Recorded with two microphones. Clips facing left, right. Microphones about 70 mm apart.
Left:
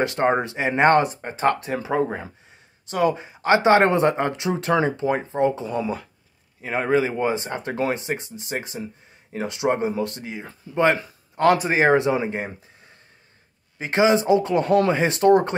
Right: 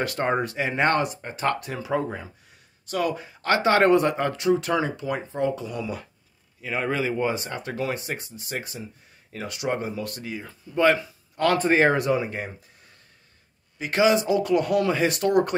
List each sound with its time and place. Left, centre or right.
0.0 s speech: left
2.9 s speech: left
11.5 s speech: centre
11.9 s speech: left